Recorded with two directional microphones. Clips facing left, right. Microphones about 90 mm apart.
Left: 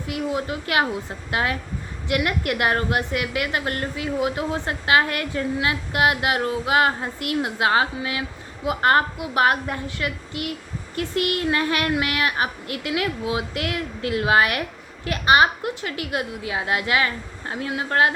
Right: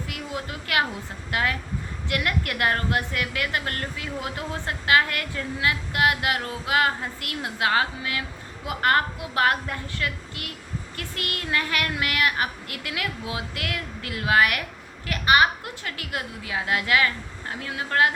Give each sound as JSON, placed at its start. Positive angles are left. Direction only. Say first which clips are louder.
{"t": 0.1, "sound": "a woman's voice", "louder": "left 11 dB", "side_deg": 25}